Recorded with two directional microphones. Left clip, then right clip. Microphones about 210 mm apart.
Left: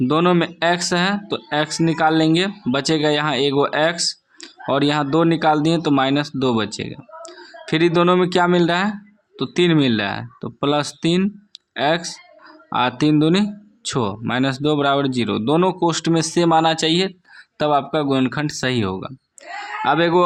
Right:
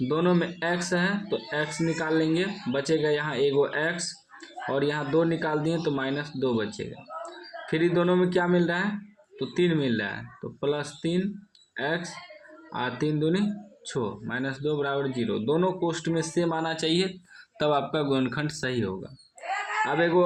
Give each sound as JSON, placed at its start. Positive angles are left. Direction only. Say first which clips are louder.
{"t": 0.1, "sound": "speech", "louder": "left 7 dB", "side_deg": 45}